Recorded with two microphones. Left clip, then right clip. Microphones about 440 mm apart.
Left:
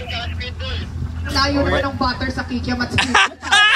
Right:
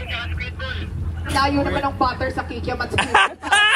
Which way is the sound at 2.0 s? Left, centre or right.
Centre.